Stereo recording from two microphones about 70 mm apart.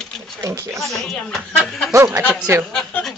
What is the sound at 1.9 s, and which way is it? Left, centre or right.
Speech, right.